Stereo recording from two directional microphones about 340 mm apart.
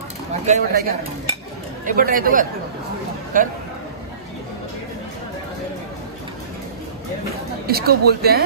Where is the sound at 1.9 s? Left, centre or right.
Right.